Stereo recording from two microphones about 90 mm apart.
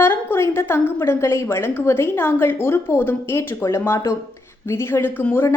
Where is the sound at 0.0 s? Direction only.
25° left (ahead or behind).